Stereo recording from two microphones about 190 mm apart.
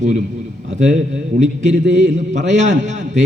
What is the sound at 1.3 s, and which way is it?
Speech, 35° right (ahead or behind).